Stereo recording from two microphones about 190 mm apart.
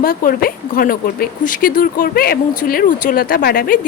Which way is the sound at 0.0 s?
50° left (ahead or behind).